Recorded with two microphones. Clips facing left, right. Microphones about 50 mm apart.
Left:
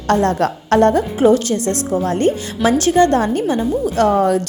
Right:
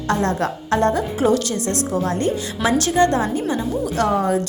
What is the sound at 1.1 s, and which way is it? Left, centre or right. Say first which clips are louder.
A woman's voice: left 5 dB; left.